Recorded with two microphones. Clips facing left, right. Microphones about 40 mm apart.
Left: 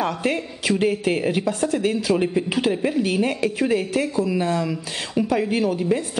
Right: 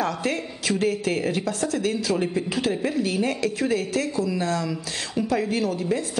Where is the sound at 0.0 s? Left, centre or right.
Centre.